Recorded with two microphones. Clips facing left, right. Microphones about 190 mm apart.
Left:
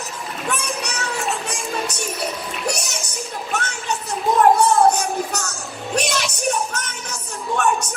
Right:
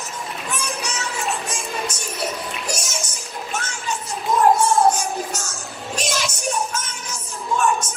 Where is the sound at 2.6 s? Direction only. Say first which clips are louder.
Left 7 dB; 65° left (ahead or behind).